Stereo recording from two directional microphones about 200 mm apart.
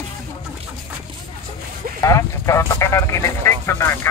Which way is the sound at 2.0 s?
15° left (ahead or behind).